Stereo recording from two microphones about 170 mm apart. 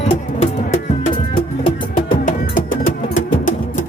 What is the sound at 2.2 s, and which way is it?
Music, 50° left (ahead or behind).